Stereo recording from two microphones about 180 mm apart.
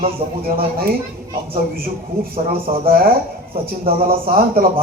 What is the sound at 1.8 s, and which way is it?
A man's voice, 55° right (ahead or behind).